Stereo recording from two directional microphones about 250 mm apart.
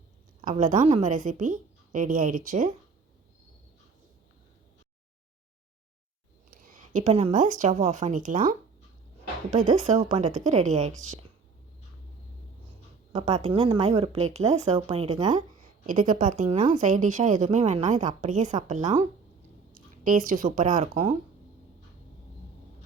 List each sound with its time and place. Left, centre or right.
0.4 s a woman's voice: right
6.5 s a woman's voice: right
13.1 s a woman's voice: right